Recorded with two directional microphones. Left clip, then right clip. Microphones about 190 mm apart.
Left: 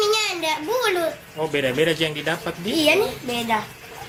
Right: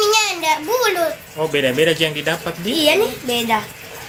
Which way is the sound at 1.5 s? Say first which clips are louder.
Right 5 dB; 5° right (ahead or behind).